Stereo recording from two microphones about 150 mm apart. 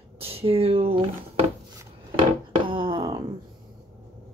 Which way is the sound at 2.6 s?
35° right (ahead or behind).